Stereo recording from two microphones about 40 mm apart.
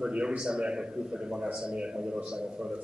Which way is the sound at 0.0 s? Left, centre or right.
Right.